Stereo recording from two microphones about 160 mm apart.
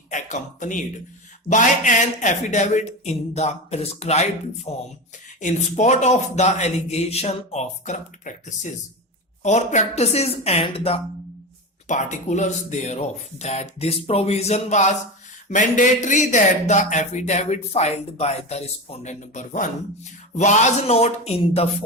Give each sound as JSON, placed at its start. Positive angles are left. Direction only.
{"t": 0.1, "sound": "a woman's voice", "side_deg": 50}
{"t": 11.9, "sound": "a woman's voice", "side_deg": 50}